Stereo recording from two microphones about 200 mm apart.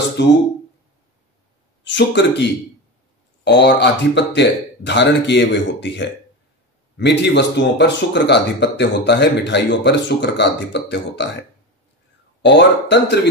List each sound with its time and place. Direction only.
0.2 s speech: 60° left (ahead or behind)
2.0 s speech: 60° left (ahead or behind)
3.4 s speech: 60° left (ahead or behind)
12.4 s speech: 60° left (ahead or behind)